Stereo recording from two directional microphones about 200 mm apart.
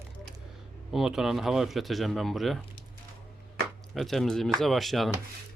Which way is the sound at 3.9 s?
Centre (ahead or behind).